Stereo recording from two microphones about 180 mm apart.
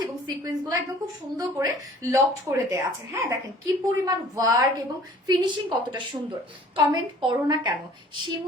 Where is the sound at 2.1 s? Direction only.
15° right (ahead or behind).